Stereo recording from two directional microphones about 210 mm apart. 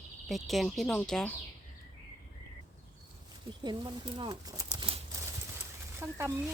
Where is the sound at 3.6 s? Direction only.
20° right (ahead or behind).